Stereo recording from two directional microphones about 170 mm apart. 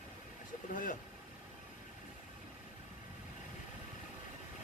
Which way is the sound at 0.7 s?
50° left (ahead or behind).